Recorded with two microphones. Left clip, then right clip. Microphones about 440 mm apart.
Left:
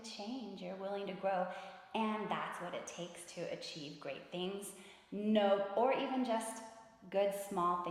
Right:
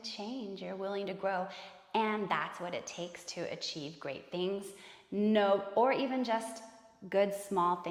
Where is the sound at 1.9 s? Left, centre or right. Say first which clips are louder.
Right 6 dB; right.